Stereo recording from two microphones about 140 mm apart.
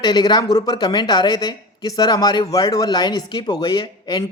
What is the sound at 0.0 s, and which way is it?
A man's voice, 30° left (ahead or behind).